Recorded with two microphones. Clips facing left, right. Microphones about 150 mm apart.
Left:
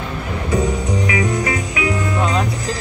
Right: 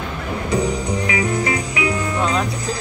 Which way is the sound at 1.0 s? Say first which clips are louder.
Left 1 dB; 30° right (ahead or behind).